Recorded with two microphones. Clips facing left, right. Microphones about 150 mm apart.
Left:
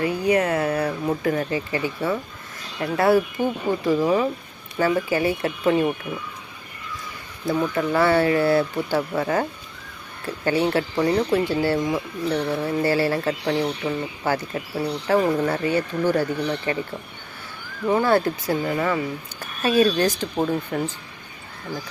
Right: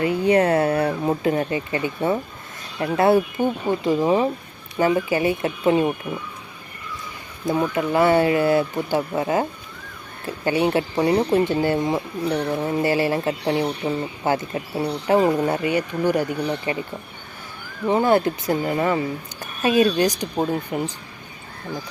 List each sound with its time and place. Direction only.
0.0 s speech: 25° right (ahead or behind)
7.4 s speech: 20° right (ahead or behind)
17.8 s speech: 20° right (ahead or behind)